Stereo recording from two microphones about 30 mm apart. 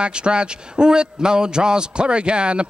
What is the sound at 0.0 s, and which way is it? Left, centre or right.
A man's voice, right.